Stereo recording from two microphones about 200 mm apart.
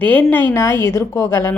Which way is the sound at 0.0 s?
10° left (ahead or behind).